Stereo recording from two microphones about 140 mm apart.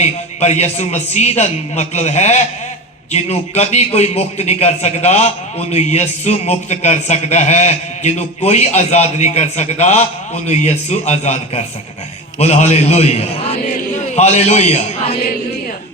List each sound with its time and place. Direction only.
0.0 s a man's voice: 55° left (ahead or behind)